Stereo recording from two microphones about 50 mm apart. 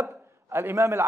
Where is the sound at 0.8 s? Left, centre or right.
Right.